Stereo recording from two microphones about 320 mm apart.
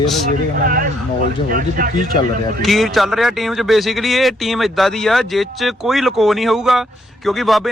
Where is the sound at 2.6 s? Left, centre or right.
Centre.